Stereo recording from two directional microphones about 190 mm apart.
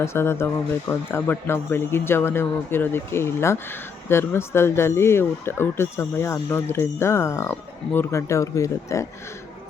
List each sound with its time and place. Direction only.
0.0 s speech: 15° left (ahead or behind)